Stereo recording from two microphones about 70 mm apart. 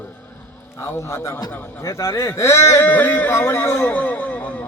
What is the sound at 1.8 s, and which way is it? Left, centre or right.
A man's voice, left.